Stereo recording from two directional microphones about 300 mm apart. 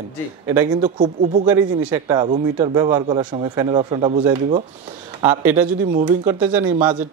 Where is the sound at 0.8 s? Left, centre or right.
Right.